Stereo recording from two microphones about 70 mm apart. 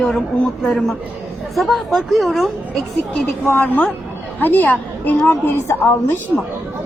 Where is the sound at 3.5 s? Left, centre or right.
Left.